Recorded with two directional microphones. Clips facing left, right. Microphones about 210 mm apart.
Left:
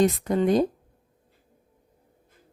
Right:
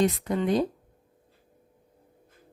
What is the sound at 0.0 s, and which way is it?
Speech, 45° left (ahead or behind).